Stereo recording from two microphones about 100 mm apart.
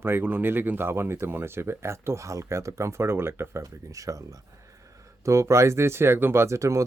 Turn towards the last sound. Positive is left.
turn(degrees=-30)  # may be behind; listen again after turning